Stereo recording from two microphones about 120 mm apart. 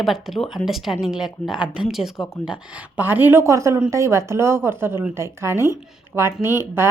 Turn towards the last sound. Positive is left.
turn(degrees=-20)  # may be behind; listen again after turning